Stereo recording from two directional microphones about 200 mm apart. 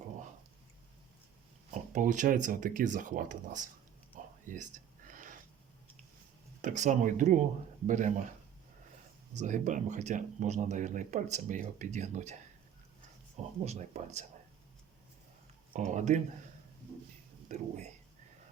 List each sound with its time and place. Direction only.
1.9 s speech: 40° right (ahead or behind)
4.4 s a sound: 40° right (ahead or behind)
6.6 s speech: 40° right (ahead or behind)
9.3 s speech: 35° right (ahead or behind)
15.7 s speech: 35° right (ahead or behind)
17.5 s speech: 35° right (ahead or behind)